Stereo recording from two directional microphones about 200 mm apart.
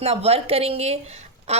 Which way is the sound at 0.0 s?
30° right (ahead or behind).